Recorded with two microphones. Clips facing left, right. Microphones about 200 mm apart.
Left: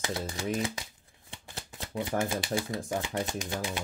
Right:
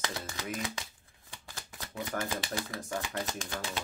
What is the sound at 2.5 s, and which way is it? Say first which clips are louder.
Speech: left 5 dB; 20° left (ahead or behind).